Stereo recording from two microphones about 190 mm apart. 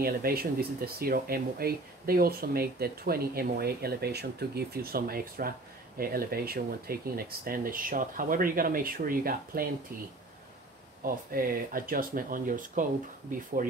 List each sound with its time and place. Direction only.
0.0 s speech: 50° right (ahead or behind)
11.1 s speech: 50° right (ahead or behind)